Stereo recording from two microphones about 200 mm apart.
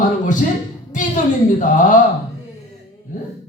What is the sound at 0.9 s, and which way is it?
Speech, 40° left (ahead or behind).